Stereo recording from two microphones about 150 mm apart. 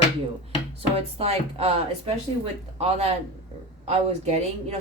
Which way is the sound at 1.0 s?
45° right (ahead or behind).